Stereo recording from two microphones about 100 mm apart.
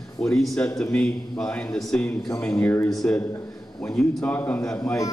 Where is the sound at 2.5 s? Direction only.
25° left (ahead or behind).